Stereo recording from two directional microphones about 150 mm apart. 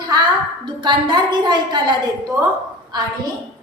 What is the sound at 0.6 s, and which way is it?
A woman's voice, 30° right (ahead or behind).